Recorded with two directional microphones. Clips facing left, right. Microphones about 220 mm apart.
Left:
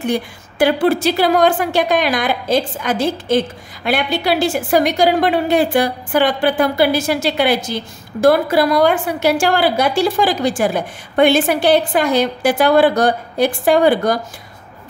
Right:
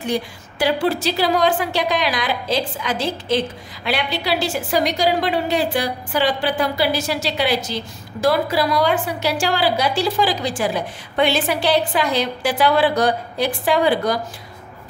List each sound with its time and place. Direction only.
0.0 s a woman's voice: 55° left (ahead or behind)